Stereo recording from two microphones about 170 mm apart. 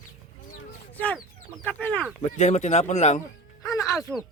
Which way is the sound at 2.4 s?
40° left (ahead or behind).